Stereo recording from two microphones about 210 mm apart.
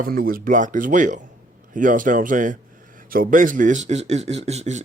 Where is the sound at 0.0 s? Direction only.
45° right (ahead or behind).